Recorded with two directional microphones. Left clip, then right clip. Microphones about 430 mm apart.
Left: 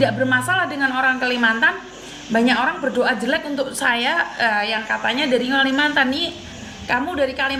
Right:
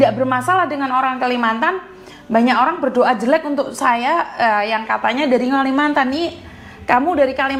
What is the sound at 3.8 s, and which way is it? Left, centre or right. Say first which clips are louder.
A woman's voice: right 3 dB; right.